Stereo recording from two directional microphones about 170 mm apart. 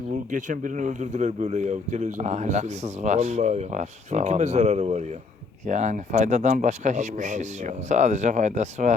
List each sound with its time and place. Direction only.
0.3 s speech: 50° right (ahead or behind)